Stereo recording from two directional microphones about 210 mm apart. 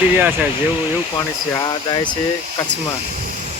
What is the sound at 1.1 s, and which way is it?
Speech, 20° left (ahead or behind).